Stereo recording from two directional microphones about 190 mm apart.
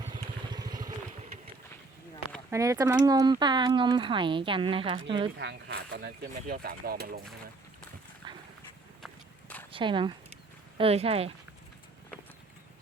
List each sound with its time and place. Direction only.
0.0 s vehicle: 20° right (ahead or behind)
2.5 s speech: 15° right (ahead or behind)
5.4 s speech: 65° right (ahead or behind)
9.0 s walk: 5° left (ahead or behind)
9.7 s speech: 25° right (ahead or behind)